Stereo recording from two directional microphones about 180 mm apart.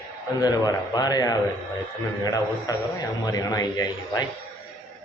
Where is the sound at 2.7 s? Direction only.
20° left (ahead or behind).